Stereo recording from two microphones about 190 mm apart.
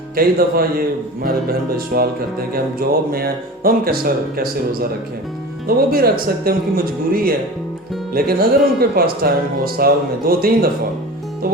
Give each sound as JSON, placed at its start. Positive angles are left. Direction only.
{"t": 0.2, "sound": "speech", "side_deg": -50}